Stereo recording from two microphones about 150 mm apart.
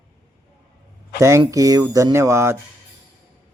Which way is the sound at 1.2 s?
20° right (ahead or behind).